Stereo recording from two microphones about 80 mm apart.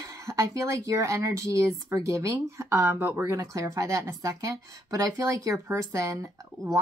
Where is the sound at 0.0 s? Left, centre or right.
Right.